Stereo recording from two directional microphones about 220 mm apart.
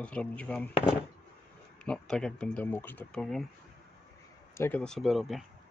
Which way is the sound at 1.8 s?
5° left (ahead or behind).